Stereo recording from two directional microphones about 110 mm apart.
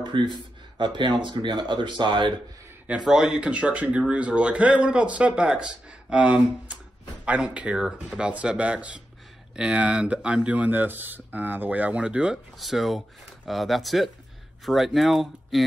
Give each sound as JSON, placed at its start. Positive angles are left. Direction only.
{"t": 0.1, "sound": "speech", "side_deg": -45}
{"t": 3.0, "sound": "speech", "side_deg": -5}